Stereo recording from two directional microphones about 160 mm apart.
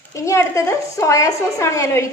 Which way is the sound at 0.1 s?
20° left (ahead or behind).